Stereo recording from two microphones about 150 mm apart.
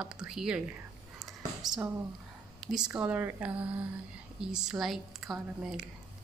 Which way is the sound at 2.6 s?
5° right (ahead or behind).